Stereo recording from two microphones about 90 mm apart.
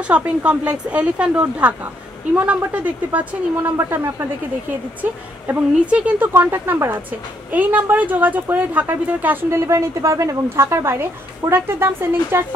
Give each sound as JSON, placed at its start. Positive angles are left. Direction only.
{"t": 0.1, "sound": "speech", "side_deg": -15}
{"t": 3.7, "sound": "a woman's voice", "side_deg": -30}
{"t": 5.5, "sound": "a woman's voice", "side_deg": -15}
{"t": 9.7, "sound": "a woman's voice", "side_deg": -35}